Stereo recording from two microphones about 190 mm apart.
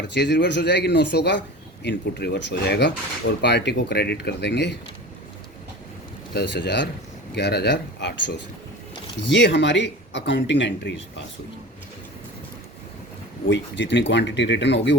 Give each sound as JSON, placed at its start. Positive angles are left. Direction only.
{"t": 0.1, "sound": "a man's voice", "side_deg": 65}
{"t": 6.3, "sound": "a man's voice", "side_deg": 65}
{"t": 13.5, "sound": "speech", "side_deg": 70}